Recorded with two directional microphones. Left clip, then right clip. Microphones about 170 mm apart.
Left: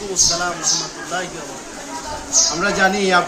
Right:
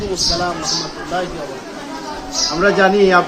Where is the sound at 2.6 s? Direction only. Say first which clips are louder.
Right 9 dB; 40° left (ahead or behind).